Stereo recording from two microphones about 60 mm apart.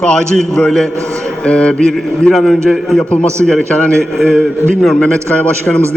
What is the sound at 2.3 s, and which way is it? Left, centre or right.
Speech, centre.